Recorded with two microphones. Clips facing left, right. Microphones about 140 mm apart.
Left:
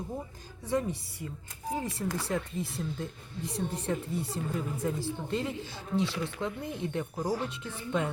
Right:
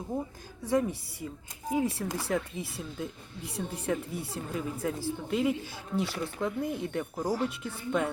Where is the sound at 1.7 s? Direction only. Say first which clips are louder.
Right 4 dB; 10° right (ahead or behind).